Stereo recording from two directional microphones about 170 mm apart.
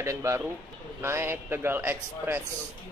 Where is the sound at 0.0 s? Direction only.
15° right (ahead or behind).